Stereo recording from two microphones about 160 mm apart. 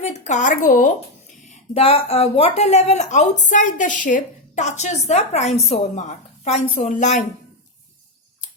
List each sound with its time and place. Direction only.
0.0 s a woman's voice: 45° left (ahead or behind)
1.5 s a woman's voice: 40° left (ahead or behind)